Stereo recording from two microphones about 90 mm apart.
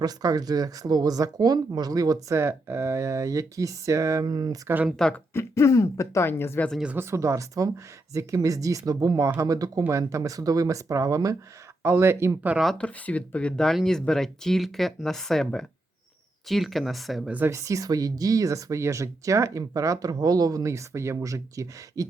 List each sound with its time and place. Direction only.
0.0 s speech: 45° right (ahead or behind)
4.3 s speech: 50° right (ahead or behind)
4.9 s speech: 5° left (ahead or behind)
5.3 s speech: 30° left (ahead or behind)
6.9 s speech: 30° right (ahead or behind)
12.5 s speech: centre (ahead or behind)
12.8 s speech: 15° left (ahead or behind); by 17.2 s centre (ahead or behind)
17.2 s speech: 20° right (ahead or behind)
17.5 s speech: 35° right (ahead or behind)